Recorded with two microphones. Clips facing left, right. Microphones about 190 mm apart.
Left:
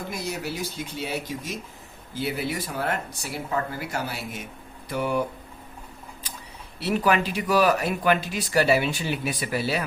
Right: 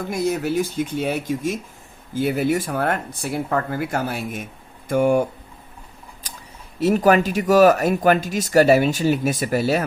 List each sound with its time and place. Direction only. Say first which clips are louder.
0.1 s speech: right 13 dB; 50° right (ahead or behind)
6.7 s speech: right 7 dB; 45° right (ahead or behind)